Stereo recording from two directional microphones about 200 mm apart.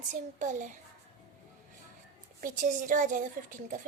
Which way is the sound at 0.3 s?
40° right (ahead or behind).